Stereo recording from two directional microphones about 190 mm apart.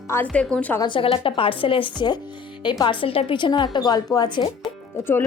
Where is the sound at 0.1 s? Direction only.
10° left (ahead or behind).